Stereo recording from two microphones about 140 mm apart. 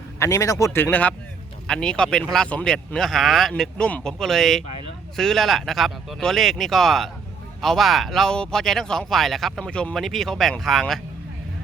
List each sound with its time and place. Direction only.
0.2 s speech: 20° left (ahead or behind); by 11.0 s centre (ahead or behind)